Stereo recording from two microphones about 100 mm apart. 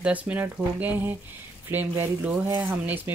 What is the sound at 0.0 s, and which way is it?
Speech, 15° right (ahead or behind).